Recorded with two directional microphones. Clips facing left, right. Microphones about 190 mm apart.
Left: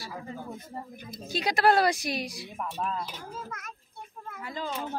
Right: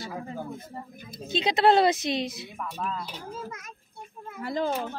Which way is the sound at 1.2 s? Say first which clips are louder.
Right 2 dB; 20° right (ahead or behind).